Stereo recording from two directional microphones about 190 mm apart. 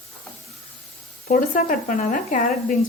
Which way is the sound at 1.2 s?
45° left (ahead or behind).